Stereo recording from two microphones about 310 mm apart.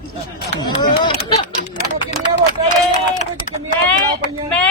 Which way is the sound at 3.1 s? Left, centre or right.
Centre.